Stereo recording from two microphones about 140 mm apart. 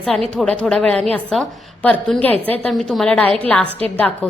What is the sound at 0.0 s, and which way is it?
A woman's voice, 5° left (ahead or behind).